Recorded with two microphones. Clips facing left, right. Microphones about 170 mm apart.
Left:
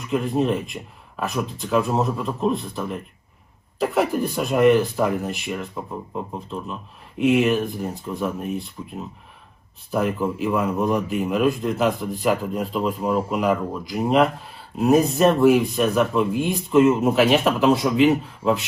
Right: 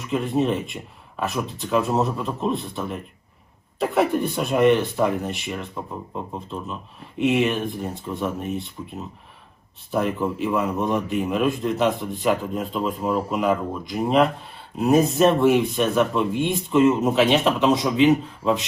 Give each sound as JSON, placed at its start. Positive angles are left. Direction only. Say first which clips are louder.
{"t": 0.0, "sound": "a man's voice", "louder": "even", "side_deg": 0}